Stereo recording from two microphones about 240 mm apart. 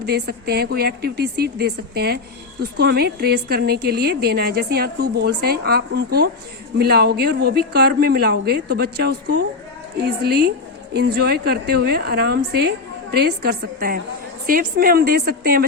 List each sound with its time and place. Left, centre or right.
0.0 s a woman's voice: right